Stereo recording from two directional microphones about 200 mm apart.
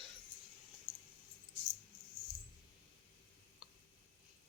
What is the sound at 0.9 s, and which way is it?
Keys jangling, 20° left (ahead or behind).